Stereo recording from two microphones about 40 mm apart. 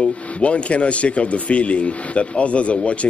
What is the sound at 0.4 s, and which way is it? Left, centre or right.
Speech, left.